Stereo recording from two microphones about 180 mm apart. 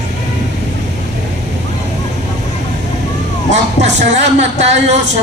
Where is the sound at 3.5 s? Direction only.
40° right (ahead or behind).